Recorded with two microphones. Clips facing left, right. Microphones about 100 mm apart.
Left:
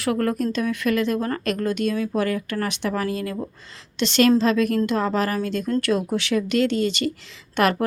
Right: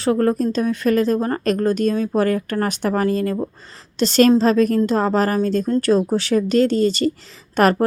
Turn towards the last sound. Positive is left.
turn(degrees=-40)  # may be behind; listen again after turning